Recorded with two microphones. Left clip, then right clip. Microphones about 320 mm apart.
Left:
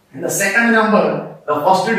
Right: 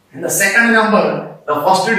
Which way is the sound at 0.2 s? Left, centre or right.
Centre.